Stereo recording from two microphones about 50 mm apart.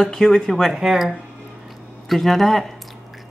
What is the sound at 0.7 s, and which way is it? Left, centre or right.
Speech, centre.